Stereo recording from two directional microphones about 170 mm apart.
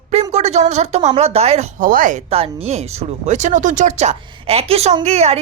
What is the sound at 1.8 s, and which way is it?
Speech, 55° right (ahead or behind).